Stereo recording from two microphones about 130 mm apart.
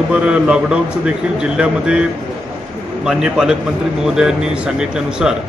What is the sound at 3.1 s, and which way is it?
Speech, 5° right (ahead or behind).